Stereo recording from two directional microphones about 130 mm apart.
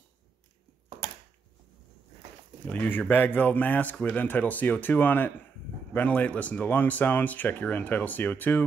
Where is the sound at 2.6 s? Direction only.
15° left (ahead or behind).